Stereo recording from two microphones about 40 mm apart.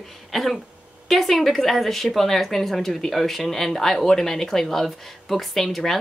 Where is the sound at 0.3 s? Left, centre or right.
Centre.